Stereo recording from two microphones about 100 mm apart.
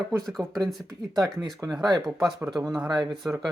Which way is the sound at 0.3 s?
5° left (ahead or behind).